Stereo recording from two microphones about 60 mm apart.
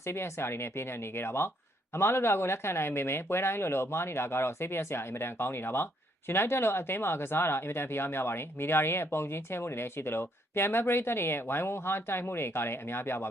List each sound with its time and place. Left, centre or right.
0.0 s speech: left